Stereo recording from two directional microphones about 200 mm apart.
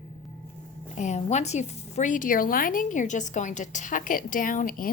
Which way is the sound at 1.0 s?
35° left (ahead or behind).